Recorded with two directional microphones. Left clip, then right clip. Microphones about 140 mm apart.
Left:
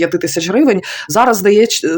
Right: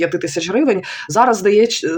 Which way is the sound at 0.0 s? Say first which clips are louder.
Left 3 dB; 35° left (ahead or behind).